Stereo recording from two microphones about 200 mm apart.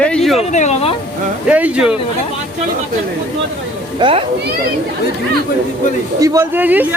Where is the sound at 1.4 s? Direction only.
5° right (ahead or behind).